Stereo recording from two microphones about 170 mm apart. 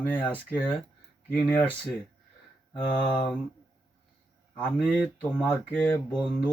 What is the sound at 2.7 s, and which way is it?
Speech, 25° left (ahead or behind).